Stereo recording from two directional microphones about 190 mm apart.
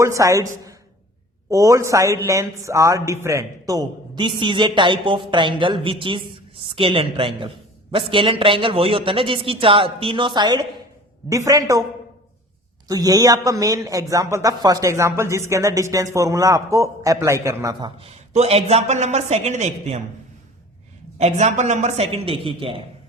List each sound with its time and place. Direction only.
0.0 s a woman's voice: 15° right (ahead or behind)
12.9 s speech: 20° right (ahead or behind); by 20.0 s 35° right (ahead or behind)
21.2 s a man's voice: 35° right (ahead or behind)